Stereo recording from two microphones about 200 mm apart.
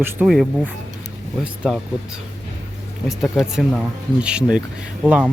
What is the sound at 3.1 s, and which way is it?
Speech, centre (ahead or behind).